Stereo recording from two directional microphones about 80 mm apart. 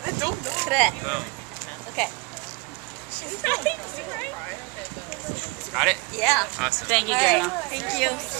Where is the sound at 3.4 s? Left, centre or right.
Left.